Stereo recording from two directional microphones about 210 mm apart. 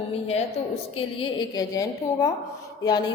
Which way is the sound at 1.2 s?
20° left (ahead or behind).